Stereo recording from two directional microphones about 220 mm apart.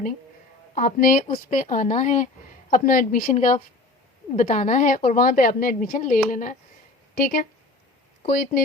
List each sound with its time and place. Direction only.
0.8 s a woman's voice: 40° left (ahead or behind)
8.3 s speech: 45° left (ahead or behind)